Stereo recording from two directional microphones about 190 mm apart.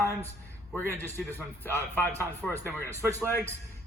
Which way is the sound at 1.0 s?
15° right (ahead or behind).